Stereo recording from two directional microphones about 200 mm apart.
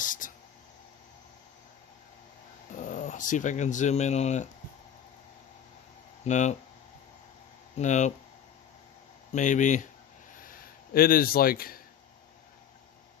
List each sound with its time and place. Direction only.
0.0 s a sound: 40° left (ahead or behind)
2.7 s speech: 40° left (ahead or behind)
6.2 s speech: 35° left (ahead or behind)
7.8 s speech: 35° left (ahead or behind)
9.3 s speech: 40° left (ahead or behind)
10.4 s a sound: 45° left (ahead or behind)